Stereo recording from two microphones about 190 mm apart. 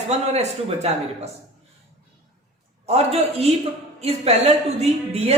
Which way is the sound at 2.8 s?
35° right (ahead or behind).